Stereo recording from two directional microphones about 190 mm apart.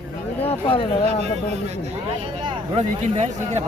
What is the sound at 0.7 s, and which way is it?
Speech, 30° left (ahead or behind).